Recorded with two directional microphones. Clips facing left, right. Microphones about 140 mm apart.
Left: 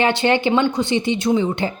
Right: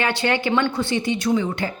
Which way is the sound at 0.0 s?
25° left (ahead or behind).